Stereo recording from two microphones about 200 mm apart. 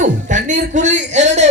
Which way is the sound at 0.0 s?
40° right (ahead or behind).